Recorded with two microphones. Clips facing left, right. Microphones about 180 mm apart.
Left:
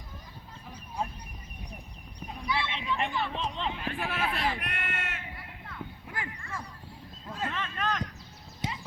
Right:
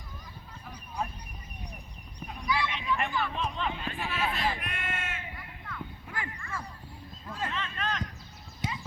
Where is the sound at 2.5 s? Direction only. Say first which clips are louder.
Right 2 dB; 25° left (ahead or behind).